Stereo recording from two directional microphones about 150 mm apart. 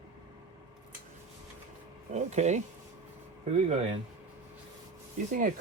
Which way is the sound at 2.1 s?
50° right (ahead or behind).